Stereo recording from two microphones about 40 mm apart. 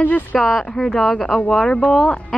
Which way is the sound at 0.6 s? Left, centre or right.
Centre.